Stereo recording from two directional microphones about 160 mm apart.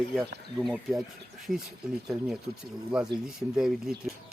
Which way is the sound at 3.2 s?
5° right (ahead or behind).